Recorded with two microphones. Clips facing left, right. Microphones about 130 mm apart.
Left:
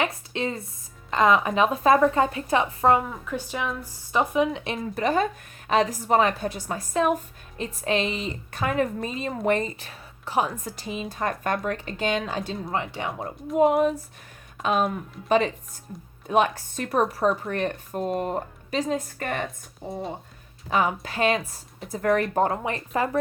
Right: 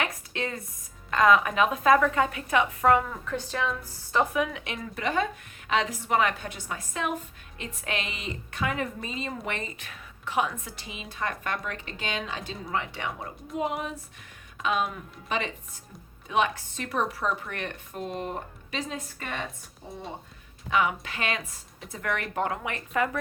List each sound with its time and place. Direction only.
0.0 s a sound: 25° left (ahead or behind)
1.1 s speech: 25° left (ahead or behind)
3.0 s a woman's voice: 10° left (ahead or behind); by 13.3 s 30° left (ahead or behind)
13.5 s a woman's voice: 50° left (ahead or behind)
20.7 s a woman's voice: 35° left (ahead or behind)